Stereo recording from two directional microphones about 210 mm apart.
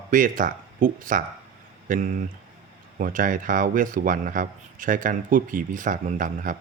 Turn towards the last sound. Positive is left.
turn(degrees=-40)  # may be behind; listen again after turning